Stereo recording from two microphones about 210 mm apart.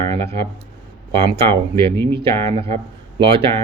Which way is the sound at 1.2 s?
25° right (ahead or behind).